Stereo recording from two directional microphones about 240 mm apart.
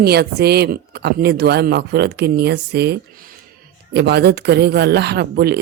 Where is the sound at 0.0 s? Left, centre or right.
Right.